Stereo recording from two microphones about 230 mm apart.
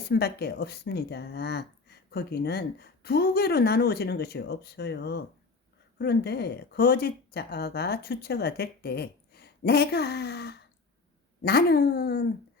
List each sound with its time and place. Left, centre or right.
0.1 s speech: left